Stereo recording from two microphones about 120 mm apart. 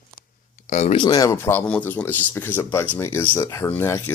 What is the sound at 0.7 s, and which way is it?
Speech, 75° left (ahead or behind).